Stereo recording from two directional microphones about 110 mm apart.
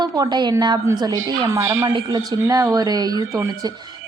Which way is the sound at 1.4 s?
25° right (ahead or behind).